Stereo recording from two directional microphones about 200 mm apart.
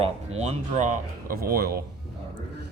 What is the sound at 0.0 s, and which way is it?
Speech, 35° right (ahead or behind).